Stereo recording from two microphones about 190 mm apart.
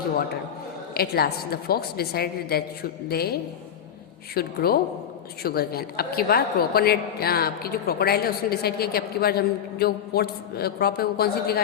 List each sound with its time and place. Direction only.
0.9 s a woman's voice: 55° left (ahead or behind)
4.4 s a woman's voice: 55° left (ahead or behind)